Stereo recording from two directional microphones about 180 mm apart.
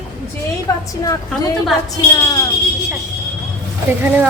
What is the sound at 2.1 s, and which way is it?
Speech, 20° left (ahead or behind).